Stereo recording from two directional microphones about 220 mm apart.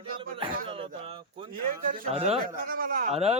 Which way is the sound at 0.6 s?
25° right (ahead or behind).